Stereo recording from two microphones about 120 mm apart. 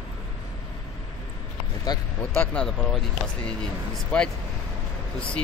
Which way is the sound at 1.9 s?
35° left (ahead or behind).